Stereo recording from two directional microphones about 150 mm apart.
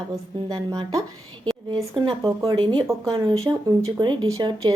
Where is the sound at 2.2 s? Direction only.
25° right (ahead or behind).